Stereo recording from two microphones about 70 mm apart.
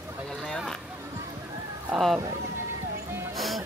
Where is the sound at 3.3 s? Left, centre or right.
Centre.